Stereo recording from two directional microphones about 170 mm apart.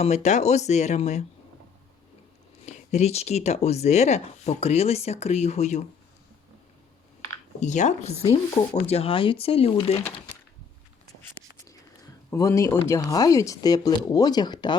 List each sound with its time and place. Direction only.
0.0 s speech: 40° left (ahead or behind)
2.6 s speech: 40° left (ahead or behind)
7.6 s speech: 45° left (ahead or behind)
11.7 s speech: 20° left (ahead or behind)